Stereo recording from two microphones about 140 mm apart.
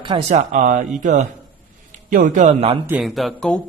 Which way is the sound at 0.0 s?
45° right (ahead or behind).